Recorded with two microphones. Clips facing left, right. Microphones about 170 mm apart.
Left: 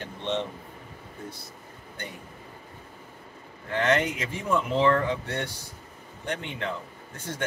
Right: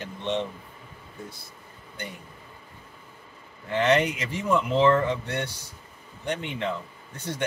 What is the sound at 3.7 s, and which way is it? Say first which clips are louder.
Speech: right 2 dB; 15° right (ahead or behind).